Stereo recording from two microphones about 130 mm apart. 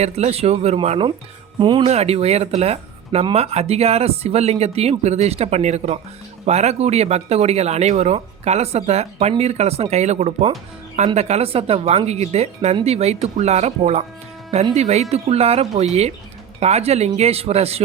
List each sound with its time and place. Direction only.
0.0 s speech: 55° right (ahead or behind)
1.9 s speech: 55° right (ahead or behind)